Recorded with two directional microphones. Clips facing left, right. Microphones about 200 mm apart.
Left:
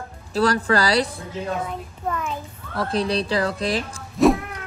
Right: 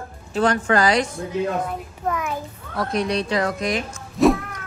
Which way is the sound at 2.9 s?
30° left (ahead or behind).